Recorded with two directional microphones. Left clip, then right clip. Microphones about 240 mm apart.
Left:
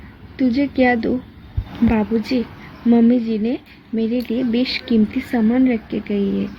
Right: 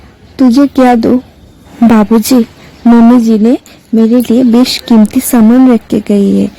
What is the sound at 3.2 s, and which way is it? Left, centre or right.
Speech, right.